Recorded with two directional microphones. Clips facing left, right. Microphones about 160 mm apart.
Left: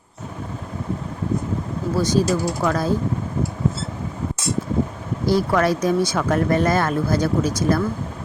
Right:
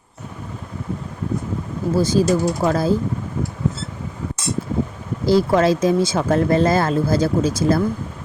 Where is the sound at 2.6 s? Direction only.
30° right (ahead or behind).